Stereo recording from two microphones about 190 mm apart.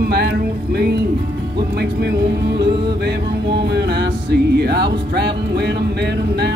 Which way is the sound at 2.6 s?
60° right (ahead or behind).